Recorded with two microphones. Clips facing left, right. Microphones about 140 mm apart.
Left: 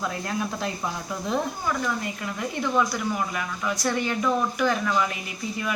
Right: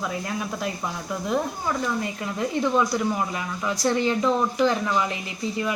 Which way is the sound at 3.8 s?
25° right (ahead or behind).